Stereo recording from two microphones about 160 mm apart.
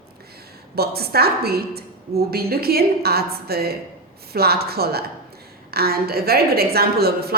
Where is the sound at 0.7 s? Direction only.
75° right (ahead or behind).